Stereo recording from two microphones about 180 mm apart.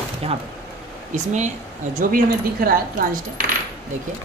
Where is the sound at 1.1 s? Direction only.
40° right (ahead or behind).